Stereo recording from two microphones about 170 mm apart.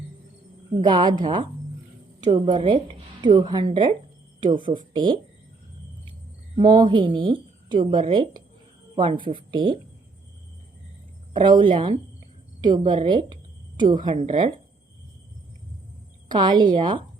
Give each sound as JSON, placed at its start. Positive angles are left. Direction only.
{"t": 0.8, "sound": "a woman's voice", "side_deg": -30}
{"t": 6.6, "sound": "a woman's voice", "side_deg": -25}
{"t": 11.3, "sound": "a woman's voice", "side_deg": -25}
{"t": 16.3, "sound": "a woman's voice", "side_deg": -25}